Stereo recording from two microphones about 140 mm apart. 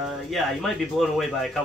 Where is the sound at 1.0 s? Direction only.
Centre (ahead or behind).